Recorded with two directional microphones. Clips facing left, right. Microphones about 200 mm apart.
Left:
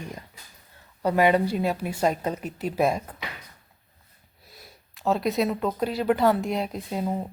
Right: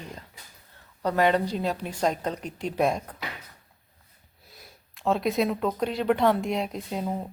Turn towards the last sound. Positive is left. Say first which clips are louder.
# left 2 dB
turn(degrees=5)  # may be behind; listen again after turning